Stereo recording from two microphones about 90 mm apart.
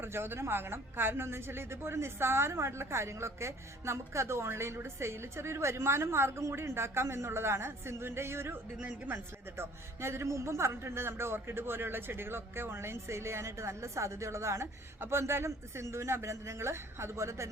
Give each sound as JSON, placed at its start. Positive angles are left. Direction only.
{"t": 0.0, "sound": "a woman's voice", "side_deg": -25}